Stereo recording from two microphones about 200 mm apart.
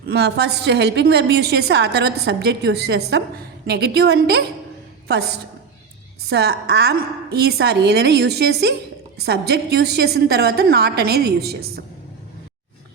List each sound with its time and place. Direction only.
0.1 s a woman's voice: 55° right (ahead or behind)